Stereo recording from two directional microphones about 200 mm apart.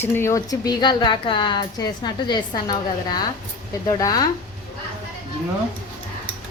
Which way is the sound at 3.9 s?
20° left (ahead or behind).